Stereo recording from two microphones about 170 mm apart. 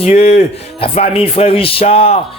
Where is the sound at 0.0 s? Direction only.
40° left (ahead or behind).